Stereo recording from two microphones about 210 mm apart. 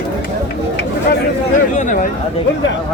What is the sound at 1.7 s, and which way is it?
Speech, 40° left (ahead or behind).